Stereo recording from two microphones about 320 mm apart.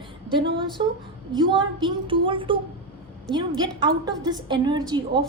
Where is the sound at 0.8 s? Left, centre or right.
Centre.